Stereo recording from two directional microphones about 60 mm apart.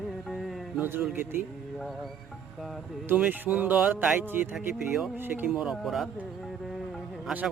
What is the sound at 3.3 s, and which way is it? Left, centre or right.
A man's voice, right.